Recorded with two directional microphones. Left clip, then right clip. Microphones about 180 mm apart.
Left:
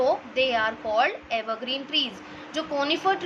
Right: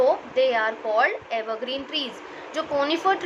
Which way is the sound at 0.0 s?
20° left (ahead or behind).